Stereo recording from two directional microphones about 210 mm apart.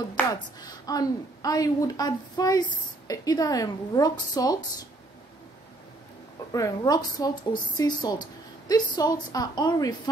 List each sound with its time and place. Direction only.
0.2 s a woman's voice: 15° left (ahead or behind)
6.5 s a woman's voice: 15° left (ahead or behind)